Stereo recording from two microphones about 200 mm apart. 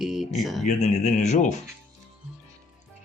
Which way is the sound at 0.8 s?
35° left (ahead or behind).